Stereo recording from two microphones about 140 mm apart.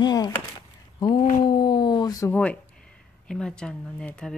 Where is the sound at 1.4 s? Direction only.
30° left (ahead or behind).